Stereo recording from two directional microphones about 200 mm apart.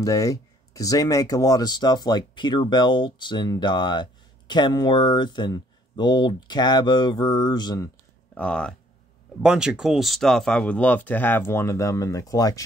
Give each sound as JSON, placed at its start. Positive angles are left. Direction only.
{"t": 0.0, "sound": "speech", "side_deg": 15}
{"t": 8.4, "sound": "speech", "side_deg": 5}